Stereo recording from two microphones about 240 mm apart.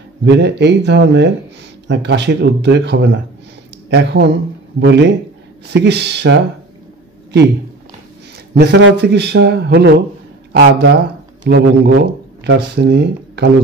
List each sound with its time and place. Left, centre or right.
0.2 s a man's voice: right
8.5 s a man's voice: right